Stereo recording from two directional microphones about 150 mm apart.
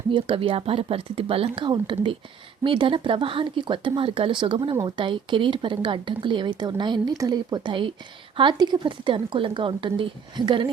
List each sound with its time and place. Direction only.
0.1 s speech: 35° right (ahead or behind)